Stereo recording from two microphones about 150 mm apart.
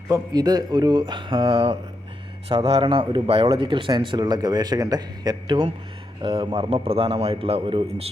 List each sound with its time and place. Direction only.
0.1 s speech: 25° right (ahead or behind)